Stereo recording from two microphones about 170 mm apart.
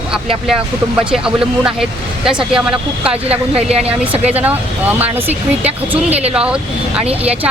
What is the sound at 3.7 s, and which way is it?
Speech, 35° right (ahead or behind).